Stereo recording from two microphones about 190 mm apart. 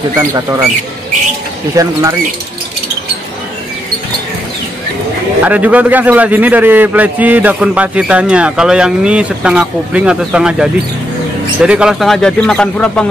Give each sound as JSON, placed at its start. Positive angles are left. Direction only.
{"t": 0.2, "sound": "a man's voice", "side_deg": -15}
{"t": 1.8, "sound": "a man's voice", "side_deg": -20}
{"t": 5.4, "sound": "a man's voice", "side_deg": -10}